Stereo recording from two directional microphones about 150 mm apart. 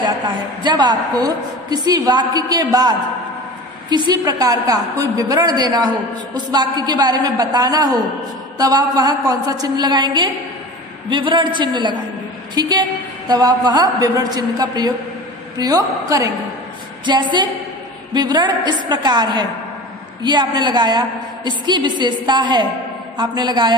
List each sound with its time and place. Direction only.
0.0 s a woman's voice: 30° right (ahead or behind)